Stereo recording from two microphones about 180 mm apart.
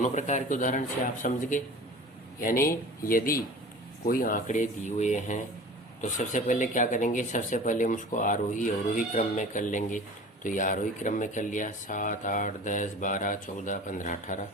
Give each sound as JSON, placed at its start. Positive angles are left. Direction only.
{"t": 0.0, "sound": "speech", "side_deg": 40}